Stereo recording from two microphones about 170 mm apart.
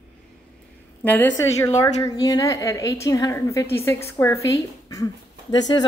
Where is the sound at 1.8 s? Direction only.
20° left (ahead or behind).